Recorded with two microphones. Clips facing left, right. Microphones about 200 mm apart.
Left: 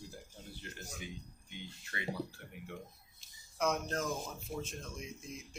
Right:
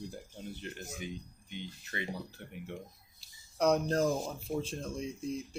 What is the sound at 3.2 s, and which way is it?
Speech, 35° right (ahead or behind).